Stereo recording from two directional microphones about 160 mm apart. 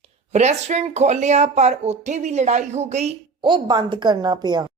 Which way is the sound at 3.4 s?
30° right (ahead or behind).